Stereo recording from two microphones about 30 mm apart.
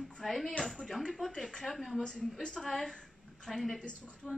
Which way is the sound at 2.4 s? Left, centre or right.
Left.